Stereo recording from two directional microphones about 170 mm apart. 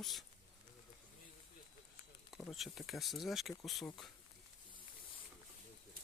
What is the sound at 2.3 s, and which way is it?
Speech, centre (ahead or behind).